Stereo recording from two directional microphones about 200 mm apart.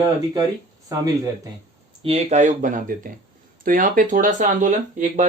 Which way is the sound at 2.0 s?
30° right (ahead or behind).